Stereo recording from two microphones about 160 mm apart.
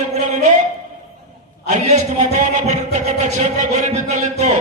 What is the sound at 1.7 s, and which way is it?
A man's voice, 45° right (ahead or behind).